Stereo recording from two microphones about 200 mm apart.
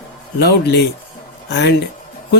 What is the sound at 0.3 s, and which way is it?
A man's voice, 55° left (ahead or behind).